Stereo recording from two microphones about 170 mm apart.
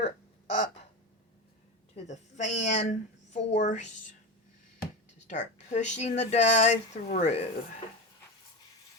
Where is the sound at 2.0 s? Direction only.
45° left (ahead or behind).